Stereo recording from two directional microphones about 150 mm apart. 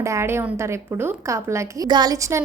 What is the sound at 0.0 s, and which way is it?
A woman's voice, 20° right (ahead or behind).